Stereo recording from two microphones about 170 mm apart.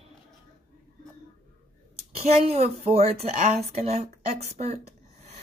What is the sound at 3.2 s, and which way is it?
Speech, 40° right (ahead or behind).